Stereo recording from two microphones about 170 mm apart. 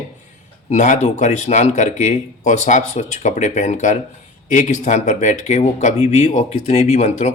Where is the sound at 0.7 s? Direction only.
45° left (ahead or behind).